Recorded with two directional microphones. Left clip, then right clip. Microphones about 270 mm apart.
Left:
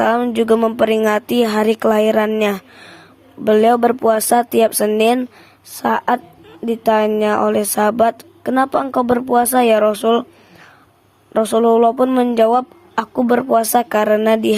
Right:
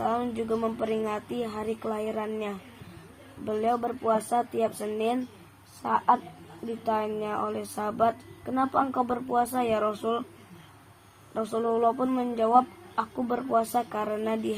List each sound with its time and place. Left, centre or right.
0.1 s a woman's voice: left
6.8 s a woman's voice: left
11.3 s a woman's voice: left